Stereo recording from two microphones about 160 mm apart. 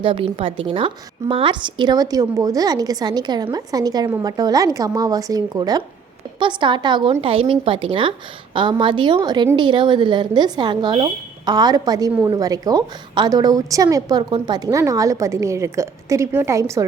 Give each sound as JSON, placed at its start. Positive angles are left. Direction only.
{"t": 0.0, "sound": "a woman's voice", "side_deg": -35}